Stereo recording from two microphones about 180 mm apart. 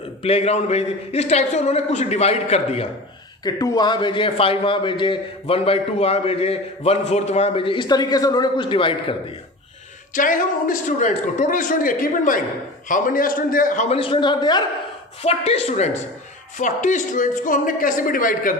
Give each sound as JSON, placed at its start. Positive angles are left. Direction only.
{"t": 0.2, "sound": "a woman's voice", "side_deg": 35}
{"t": 3.4, "sound": "a man's voice", "side_deg": 20}
{"t": 10.1, "sound": "a man's voice", "side_deg": 50}
{"t": 13.9, "sound": "a man's voice", "side_deg": 30}